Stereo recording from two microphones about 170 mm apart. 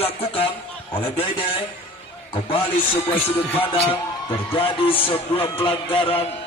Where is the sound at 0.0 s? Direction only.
35° left (ahead or behind).